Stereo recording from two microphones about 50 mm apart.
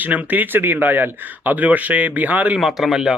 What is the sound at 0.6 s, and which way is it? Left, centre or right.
Speech, right.